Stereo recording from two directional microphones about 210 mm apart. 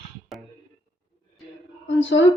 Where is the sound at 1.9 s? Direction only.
60° left (ahead or behind).